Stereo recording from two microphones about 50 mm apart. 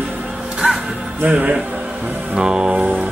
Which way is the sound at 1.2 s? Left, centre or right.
Right.